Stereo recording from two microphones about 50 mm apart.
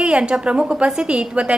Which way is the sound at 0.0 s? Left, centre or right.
Centre.